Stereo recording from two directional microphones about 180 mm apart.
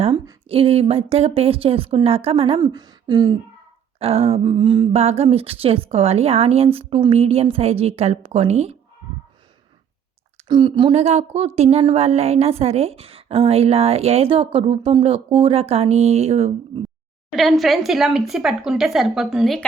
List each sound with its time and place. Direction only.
0.1 s a woman's voice: 25° right (ahead or behind)
2.6 s speech: 20° right (ahead or behind)
4.0 s a woman's voice: 35° right (ahead or behind)
10.5 s a woman's voice: 25° right (ahead or behind)
17.3 s speech: centre (ahead or behind)